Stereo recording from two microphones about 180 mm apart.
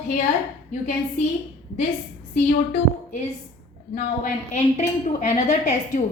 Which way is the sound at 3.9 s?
55° left (ahead or behind).